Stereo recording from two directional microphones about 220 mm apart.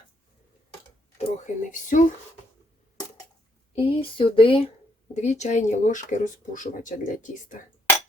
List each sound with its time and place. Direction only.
1.2 s speech: 35° left (ahead or behind)
3.8 s speech: 25° left (ahead or behind)